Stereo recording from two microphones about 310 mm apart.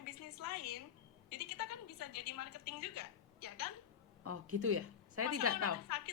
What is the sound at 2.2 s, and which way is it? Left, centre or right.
A woman's voice, left.